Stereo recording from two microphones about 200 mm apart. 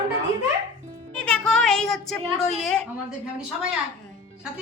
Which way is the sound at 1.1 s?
5° left (ahead or behind).